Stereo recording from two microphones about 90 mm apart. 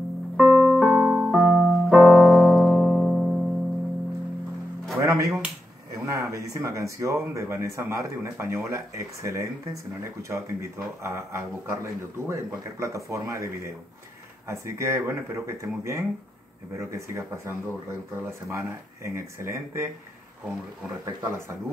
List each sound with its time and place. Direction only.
0.4 s music: centre (ahead or behind)
1.0 s keyboard: 15° right (ahead or behind)
1.3 s piano: 5° left (ahead or behind)
5.0 s music: 35° right (ahead or behind)
6.0 s speech: 40° right (ahead or behind)
14.5 s speech: 30° right (ahead or behind)
21.0 s speech: 30° right (ahead or behind)